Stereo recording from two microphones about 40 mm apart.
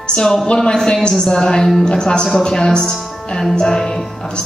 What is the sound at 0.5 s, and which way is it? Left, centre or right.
Speech, centre.